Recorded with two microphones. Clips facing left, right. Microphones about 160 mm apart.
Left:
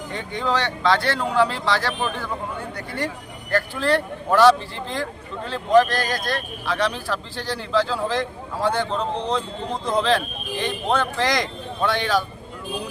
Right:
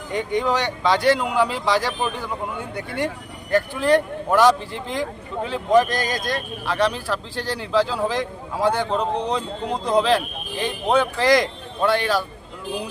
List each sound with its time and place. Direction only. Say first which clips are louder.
0.1 s speech: right 4 dB; 15° right (ahead or behind)